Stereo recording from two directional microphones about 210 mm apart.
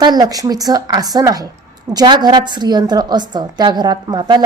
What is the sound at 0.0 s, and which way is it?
A woman's voice, 20° right (ahead or behind).